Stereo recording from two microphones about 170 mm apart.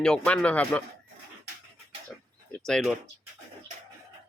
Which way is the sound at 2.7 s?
5° left (ahead or behind).